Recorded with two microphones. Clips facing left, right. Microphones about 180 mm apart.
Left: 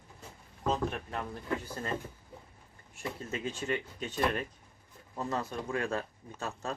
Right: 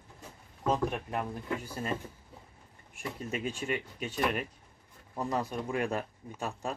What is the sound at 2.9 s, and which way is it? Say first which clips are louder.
Speech: right 1 dB; 15° right (ahead or behind).